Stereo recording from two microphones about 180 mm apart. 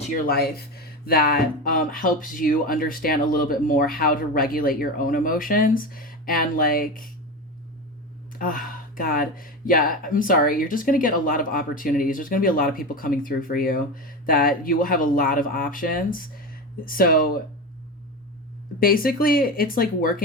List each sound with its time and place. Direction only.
0.1 s speech: 55° left (ahead or behind)
8.4 s speech: 50° left (ahead or behind)
18.8 s speech: 55° left (ahead or behind)